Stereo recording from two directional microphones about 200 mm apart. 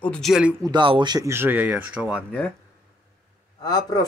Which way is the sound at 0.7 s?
25° right (ahead or behind).